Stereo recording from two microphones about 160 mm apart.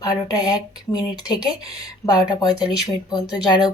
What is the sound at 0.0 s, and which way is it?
Speech, 25° left (ahead or behind).